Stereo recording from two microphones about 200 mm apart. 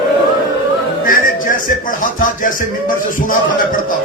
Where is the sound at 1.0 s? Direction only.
45° left (ahead or behind).